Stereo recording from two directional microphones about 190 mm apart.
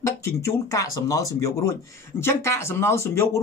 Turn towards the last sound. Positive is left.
turn(degrees=15)  # may be behind; listen again after turning